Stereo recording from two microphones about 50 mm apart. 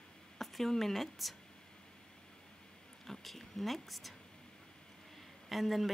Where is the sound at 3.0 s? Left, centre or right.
Centre.